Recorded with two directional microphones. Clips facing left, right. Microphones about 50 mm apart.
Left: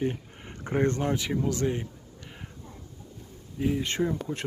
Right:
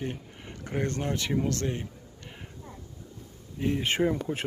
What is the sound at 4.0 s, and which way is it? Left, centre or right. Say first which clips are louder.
Speech: right 2 dB; right.